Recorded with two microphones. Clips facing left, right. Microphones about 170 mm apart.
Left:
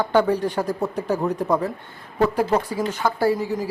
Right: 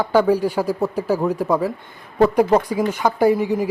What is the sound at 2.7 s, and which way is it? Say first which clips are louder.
Speech: right 4 dB; 15° right (ahead or behind).